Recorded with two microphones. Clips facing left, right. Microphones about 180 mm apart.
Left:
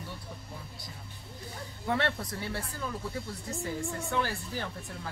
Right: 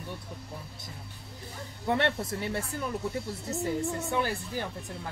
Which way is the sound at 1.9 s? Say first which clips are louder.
Right 3 dB; 25° right (ahead or behind).